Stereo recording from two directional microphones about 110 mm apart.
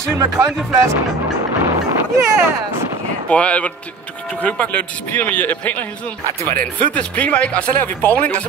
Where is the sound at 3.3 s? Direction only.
10° left (ahead or behind).